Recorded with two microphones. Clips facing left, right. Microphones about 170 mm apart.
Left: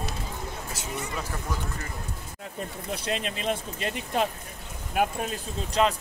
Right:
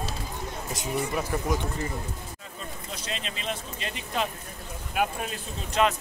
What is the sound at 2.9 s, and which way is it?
Speech, 55° left (ahead or behind).